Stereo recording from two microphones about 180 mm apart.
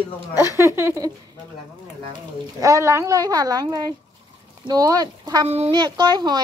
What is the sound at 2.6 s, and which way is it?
A child's voice, 15° right (ahead or behind).